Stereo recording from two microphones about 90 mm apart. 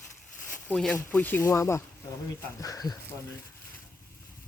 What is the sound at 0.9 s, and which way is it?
Speech, 15° left (ahead or behind).